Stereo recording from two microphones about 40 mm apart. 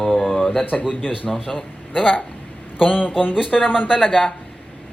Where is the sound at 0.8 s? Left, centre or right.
Centre.